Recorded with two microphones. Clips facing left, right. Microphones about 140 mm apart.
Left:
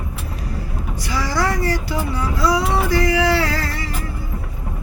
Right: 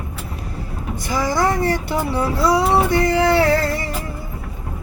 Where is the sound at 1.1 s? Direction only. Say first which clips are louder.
Right 4 dB; 50° right (ahead or behind).